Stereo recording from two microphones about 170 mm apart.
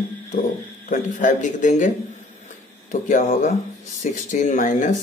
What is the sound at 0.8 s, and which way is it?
Speech, 50° left (ahead or behind).